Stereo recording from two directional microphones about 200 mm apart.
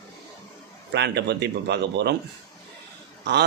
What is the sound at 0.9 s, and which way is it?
A man's voice, 60° right (ahead or behind).